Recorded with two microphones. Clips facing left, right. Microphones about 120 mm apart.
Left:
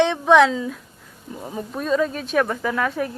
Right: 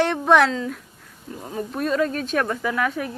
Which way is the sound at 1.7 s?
Centre (ahead or behind).